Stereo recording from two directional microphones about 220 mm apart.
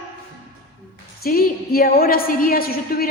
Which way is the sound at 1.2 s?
45° left (ahead or behind).